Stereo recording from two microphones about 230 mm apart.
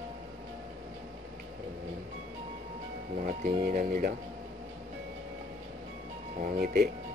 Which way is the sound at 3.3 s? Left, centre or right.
Right.